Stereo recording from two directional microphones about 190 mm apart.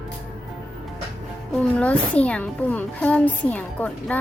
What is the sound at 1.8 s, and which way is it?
A child's voice, 5° left (ahead or behind).